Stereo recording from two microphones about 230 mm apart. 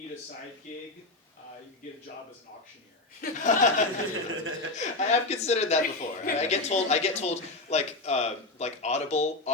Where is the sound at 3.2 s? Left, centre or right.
Left.